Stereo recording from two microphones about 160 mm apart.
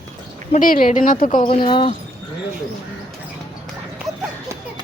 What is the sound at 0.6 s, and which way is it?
Speech, 60° left (ahead or behind).